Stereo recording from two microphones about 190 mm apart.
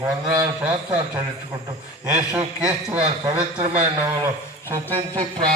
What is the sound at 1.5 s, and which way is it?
A man's voice, 20° right (ahead or behind).